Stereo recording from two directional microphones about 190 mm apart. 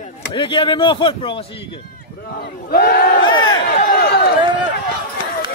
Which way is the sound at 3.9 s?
55° left (ahead or behind).